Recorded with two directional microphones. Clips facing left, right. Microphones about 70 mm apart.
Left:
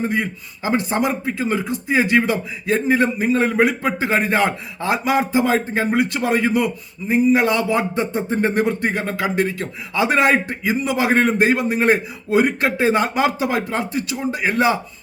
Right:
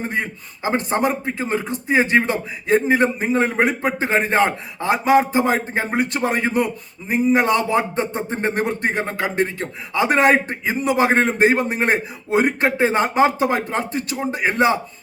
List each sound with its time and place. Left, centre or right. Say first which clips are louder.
0.1 s a man's voice: left 2 dB; right